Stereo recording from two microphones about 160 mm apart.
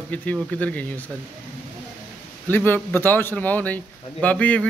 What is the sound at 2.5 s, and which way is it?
A man's voice, 10° left (ahead or behind).